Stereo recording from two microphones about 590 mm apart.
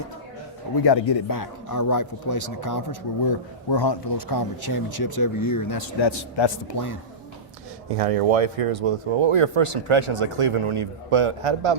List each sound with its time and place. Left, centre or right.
0.9 s a man's voice: left
5.8 s a man's voice: left
7.9 s speech: right